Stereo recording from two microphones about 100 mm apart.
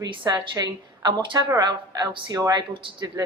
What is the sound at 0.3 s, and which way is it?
A woman's voice, 40° right (ahead or behind).